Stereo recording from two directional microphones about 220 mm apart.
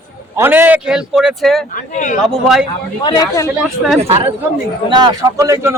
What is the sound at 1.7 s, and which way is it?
Speech, 35° left (ahead or behind).